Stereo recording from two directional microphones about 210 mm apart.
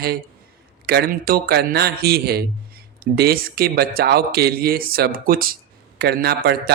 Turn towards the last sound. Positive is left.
turn(degrees=-50)  # may be behind; listen again after turning